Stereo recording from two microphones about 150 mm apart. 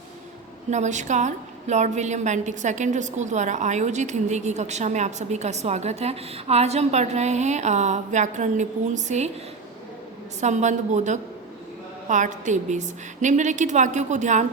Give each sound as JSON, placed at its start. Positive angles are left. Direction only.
{"t": 0.7, "sound": "a woman's voice", "side_deg": -50}
{"t": 10.4, "sound": "a woman's voice", "side_deg": -50}